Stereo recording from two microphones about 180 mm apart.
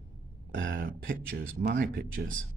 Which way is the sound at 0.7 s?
55° right (ahead or behind).